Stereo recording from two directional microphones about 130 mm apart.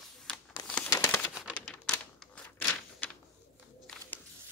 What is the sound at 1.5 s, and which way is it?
Typewriter, 5° left (ahead or behind).